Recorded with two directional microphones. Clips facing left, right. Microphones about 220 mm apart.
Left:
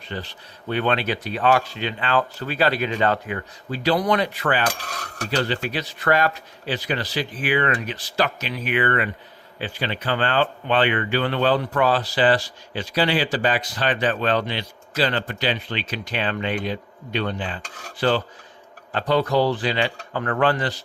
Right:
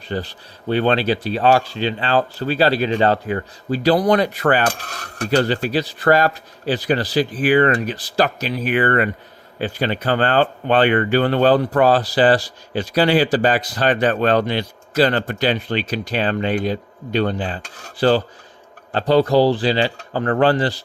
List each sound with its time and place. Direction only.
0.1 s speech: 40° right (ahead or behind)